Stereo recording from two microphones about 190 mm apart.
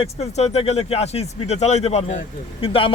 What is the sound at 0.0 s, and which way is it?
Speech, 35° left (ahead or behind).